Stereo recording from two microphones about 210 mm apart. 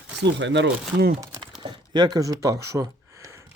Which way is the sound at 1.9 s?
20° right (ahead or behind).